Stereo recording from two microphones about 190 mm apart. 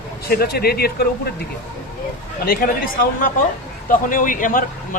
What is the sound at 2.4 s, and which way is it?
Speech, 50° left (ahead or behind).